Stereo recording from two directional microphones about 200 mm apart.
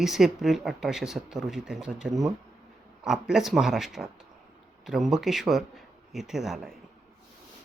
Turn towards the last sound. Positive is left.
turn(degrees=0)  # may be behind; listen again after turning